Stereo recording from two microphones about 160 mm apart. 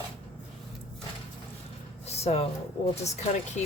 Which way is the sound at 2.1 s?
40° left (ahead or behind).